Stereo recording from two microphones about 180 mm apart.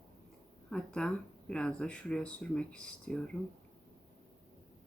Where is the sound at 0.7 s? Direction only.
5° left (ahead or behind).